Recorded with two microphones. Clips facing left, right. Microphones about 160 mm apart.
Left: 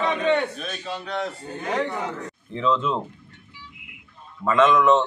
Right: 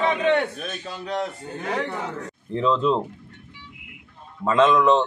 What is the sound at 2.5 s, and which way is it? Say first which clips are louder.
Speech: right 2 dB; 35° right (ahead or behind).